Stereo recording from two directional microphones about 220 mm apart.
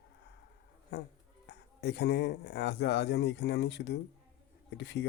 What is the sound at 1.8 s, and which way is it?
Speech, 50° left (ahead or behind).